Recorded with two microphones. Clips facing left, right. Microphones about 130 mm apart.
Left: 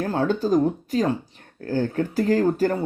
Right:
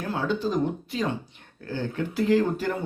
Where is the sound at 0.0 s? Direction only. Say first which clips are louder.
Left 4 dB; 45° left (ahead or behind).